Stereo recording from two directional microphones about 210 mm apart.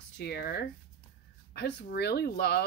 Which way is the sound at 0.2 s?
50° left (ahead or behind).